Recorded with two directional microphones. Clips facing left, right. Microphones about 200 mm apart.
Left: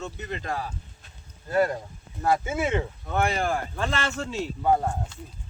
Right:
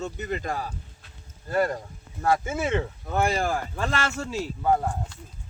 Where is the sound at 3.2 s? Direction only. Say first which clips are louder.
Right 1 dB; 10° right (ahead or behind).